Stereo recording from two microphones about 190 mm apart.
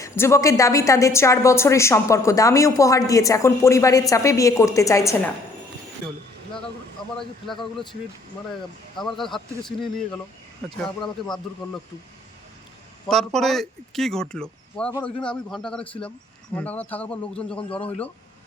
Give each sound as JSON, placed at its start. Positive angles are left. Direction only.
{"t": 0.0, "sound": "a woman's voice", "side_deg": 15}
{"t": 9.0, "sound": "speech", "side_deg": 0}
{"t": 13.1, "sound": "a woman's voice", "side_deg": 0}